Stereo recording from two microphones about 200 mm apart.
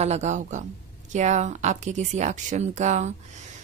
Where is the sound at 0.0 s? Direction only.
35° right (ahead or behind).